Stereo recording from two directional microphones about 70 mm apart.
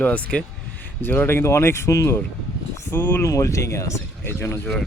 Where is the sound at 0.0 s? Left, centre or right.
Centre.